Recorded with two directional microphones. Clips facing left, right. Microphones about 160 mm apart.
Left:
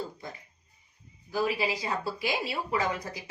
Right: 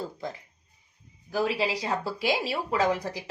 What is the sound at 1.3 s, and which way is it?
A woman's voice, 90° right.